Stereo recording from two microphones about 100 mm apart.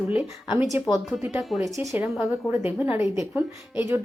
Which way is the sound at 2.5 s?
20° right (ahead or behind).